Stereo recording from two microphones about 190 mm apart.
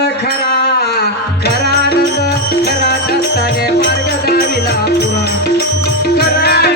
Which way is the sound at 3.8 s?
60° left (ahead or behind).